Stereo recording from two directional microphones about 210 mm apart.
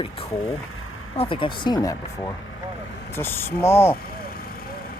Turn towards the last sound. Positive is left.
turn(degrees=10)  # may be behind; listen again after turning